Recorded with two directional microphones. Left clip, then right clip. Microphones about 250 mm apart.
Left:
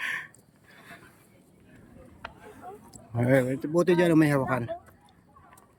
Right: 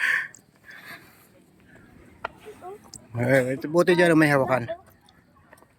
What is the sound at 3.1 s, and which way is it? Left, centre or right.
Speech, centre.